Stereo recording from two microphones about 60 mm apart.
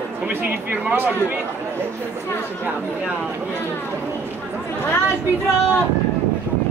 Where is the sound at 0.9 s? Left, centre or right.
Right.